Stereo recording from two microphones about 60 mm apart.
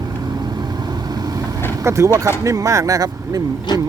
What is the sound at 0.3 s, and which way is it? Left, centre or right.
Vehicle, right.